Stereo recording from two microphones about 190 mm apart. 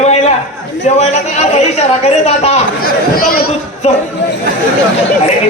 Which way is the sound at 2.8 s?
50° left (ahead or behind).